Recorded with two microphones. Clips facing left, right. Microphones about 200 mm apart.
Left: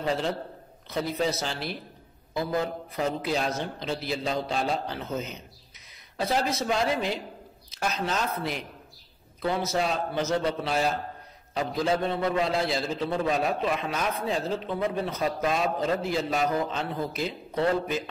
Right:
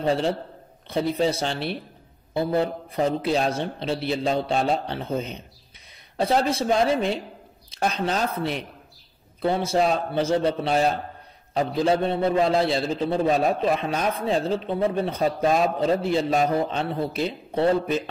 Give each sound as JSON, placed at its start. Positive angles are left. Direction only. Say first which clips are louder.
{"t": 0.0, "sound": "a man's voice", "louder": "right 5 dB", "side_deg": -30}
{"t": 6.5, "sound": "a man's voice", "louder": "right 5 dB", "side_deg": -30}